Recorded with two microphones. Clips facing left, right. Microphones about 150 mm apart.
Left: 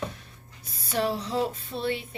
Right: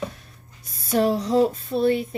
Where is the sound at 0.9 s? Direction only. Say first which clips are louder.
Right 8 dB; 40° right (ahead or behind).